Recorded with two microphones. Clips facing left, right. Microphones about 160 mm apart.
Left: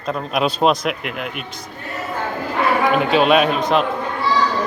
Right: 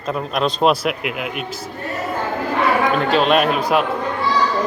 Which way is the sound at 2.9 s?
5° left (ahead or behind).